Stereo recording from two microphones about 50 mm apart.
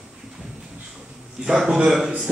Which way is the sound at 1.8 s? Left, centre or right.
Centre.